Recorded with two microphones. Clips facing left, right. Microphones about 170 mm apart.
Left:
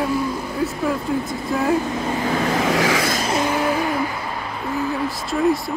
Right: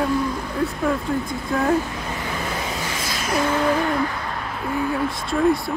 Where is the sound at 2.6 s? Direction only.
85° left.